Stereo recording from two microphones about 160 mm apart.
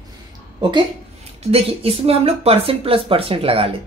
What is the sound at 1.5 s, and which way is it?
A woman's voice, 35° right (ahead or behind).